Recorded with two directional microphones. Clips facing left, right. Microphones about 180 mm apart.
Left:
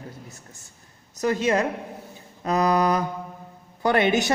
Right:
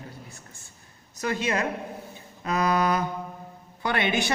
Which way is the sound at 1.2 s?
40° left (ahead or behind).